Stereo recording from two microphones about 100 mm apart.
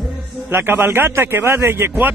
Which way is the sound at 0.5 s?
20° right (ahead or behind).